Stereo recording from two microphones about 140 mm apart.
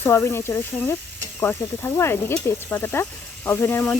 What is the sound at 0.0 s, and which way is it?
Sizzle, 20° left (ahead or behind).